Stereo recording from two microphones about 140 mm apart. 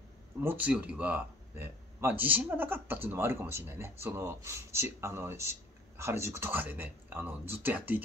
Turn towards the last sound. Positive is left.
turn(degrees=-15)  # may be behind; listen again after turning